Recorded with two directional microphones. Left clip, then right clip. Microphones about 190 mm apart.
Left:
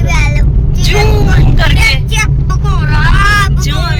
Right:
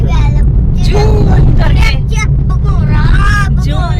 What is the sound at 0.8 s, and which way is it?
Speech, 15° right (ahead or behind).